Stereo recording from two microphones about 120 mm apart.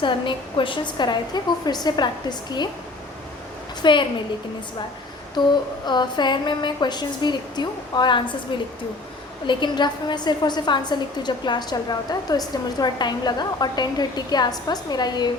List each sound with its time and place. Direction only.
0.0 s a woman's voice: 45° left (ahead or behind)
3.8 s a woman's voice: 40° left (ahead or behind)
5.8 s a woman's voice: 40° left (ahead or behind)
9.5 s a woman's voice: 40° left (ahead or behind)